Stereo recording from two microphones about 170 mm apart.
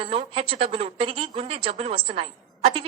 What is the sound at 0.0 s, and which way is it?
A woman's voice, 35° right (ahead or behind).